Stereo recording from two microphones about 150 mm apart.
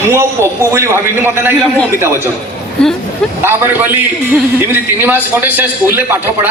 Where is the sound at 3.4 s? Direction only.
15° right (ahead or behind).